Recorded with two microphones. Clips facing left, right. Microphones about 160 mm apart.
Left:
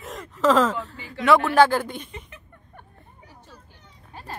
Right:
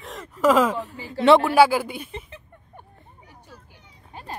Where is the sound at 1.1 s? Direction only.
30° right (ahead or behind).